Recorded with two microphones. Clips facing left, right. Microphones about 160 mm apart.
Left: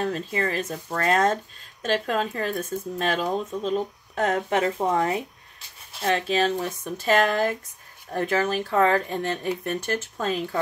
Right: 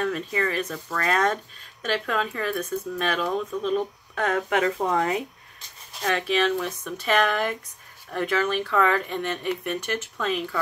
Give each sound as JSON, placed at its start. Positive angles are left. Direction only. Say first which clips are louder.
{"t": 0.0, "sound": "speech", "louder": "even", "side_deg": 35}